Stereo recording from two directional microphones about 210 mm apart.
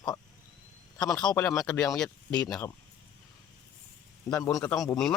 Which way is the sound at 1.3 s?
10° left (ahead or behind).